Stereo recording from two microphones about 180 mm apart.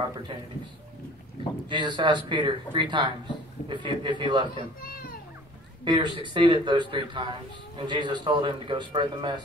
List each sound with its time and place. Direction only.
1.7 s a man's voice: 25° right (ahead or behind)
4.8 s a child's voice: 55° left (ahead or behind)
5.9 s a man's voice: 25° right (ahead or behind)